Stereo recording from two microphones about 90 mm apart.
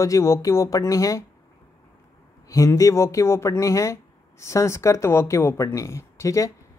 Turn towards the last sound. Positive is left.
turn(degrees=35)  # may be behind; listen again after turning